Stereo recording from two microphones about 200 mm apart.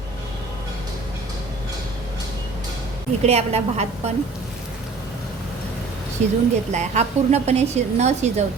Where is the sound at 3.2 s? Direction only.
30° right (ahead or behind).